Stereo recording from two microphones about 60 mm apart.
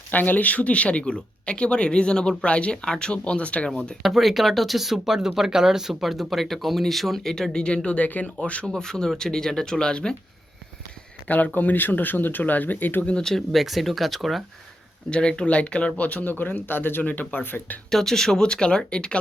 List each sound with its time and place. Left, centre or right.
0.1 s speech: left
4.0 s speech: centre; by 8.6 s left
8.6 s speech: centre
11.3 s speech: left
13.1 s speech: centre
15.1 s speech: centre; by 17.7 s left
17.9 s speech: centre